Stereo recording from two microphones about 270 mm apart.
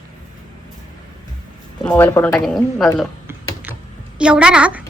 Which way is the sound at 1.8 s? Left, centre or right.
Centre.